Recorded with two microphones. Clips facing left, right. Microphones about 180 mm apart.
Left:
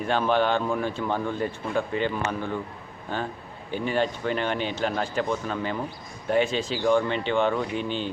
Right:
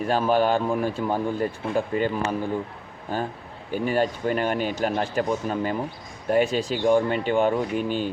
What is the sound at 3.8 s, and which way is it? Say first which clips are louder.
Speech: right 2 dB; 40° right (ahead or behind).